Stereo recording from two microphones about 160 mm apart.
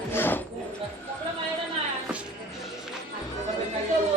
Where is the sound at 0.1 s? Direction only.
15° left (ahead or behind).